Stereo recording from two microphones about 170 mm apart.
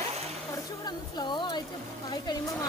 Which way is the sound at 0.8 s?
25° left (ahead or behind).